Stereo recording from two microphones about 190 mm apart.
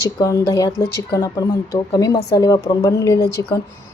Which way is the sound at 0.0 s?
15° left (ahead or behind).